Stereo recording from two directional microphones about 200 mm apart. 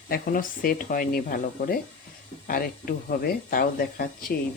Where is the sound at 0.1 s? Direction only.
45° left (ahead or behind).